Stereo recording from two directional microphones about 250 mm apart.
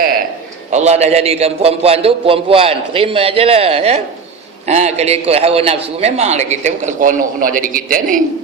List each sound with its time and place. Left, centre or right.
0.7 s a man's voice: right